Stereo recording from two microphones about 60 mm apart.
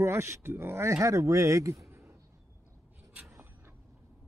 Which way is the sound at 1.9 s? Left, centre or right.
Right.